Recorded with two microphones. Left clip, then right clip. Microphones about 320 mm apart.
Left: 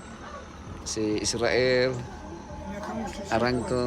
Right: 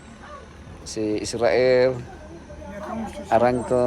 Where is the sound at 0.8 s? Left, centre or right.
Centre.